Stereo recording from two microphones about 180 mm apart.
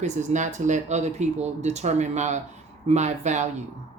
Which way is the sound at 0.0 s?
40° right (ahead or behind).